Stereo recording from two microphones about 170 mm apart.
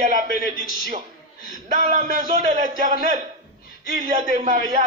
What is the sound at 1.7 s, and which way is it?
Speech, 45° right (ahead or behind).